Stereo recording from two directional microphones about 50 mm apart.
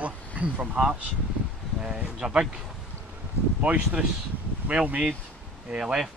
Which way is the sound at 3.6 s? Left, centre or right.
Right.